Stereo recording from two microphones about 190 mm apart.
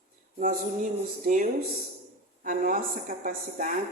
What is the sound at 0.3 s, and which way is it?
A woman's voice, 45° right (ahead or behind).